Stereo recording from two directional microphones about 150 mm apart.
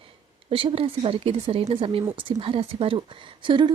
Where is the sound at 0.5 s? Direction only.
35° right (ahead or behind).